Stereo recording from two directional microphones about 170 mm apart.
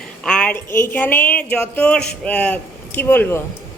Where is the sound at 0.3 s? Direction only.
5° left (ahead or behind).